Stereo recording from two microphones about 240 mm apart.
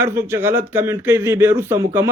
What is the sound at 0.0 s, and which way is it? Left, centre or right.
A man's voice, centre.